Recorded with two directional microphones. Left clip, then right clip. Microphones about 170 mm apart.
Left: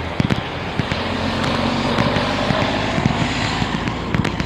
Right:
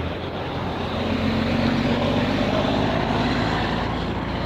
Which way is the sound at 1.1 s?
60° right (ahead or behind).